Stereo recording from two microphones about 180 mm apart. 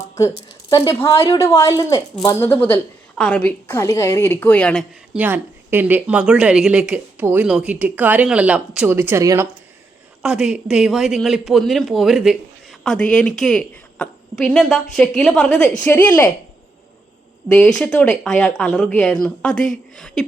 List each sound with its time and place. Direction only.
0.2 s a woman's voice: 20° left (ahead or behind)
5.1 s speech: 10° right (ahead or behind)
10.2 s a woman's voice: 5° right (ahead or behind)
17.5 s speech: 5° left (ahead or behind)